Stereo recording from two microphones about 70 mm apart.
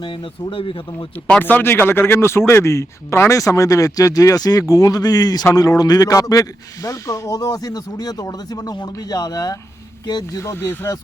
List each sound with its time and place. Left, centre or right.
1.4 s a man's voice: left
10.3 s speech: left